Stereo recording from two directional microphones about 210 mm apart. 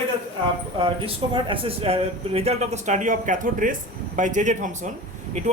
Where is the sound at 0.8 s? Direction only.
25° right (ahead or behind).